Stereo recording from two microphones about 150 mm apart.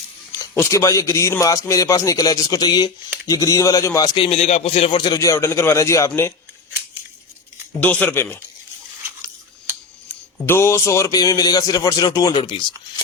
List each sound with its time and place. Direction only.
0.3 s speech: 20° left (ahead or behind)
4.3 s speech: 45° left (ahead or behind); by 6.3 s 20° left (ahead or behind)
7.7 s speech: 10° left (ahead or behind)
10.4 s speech: 15° left (ahead or behind); by 12.6 s 30° left (ahead or behind)